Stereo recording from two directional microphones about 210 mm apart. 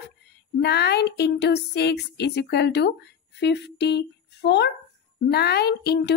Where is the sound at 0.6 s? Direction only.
50° left (ahead or behind).